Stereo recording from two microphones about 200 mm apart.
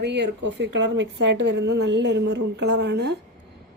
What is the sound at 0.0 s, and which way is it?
A woman's voice, 60° right (ahead or behind).